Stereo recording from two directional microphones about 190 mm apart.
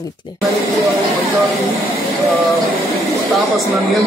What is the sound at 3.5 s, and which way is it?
Speech, centre (ahead or behind).